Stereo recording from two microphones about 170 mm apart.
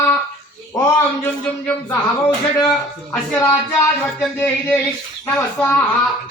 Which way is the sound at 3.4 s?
15° left (ahead or behind).